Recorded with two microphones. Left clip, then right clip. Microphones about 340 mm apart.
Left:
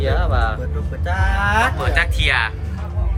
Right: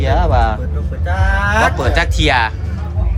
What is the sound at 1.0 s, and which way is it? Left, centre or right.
Speech, centre.